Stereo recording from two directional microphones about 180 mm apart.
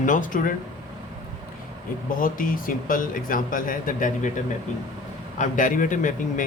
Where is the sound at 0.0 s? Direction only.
45° left (ahead or behind).